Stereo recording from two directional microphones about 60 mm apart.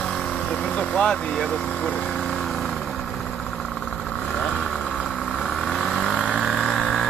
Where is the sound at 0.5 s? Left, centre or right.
Left; by 4.4 s centre.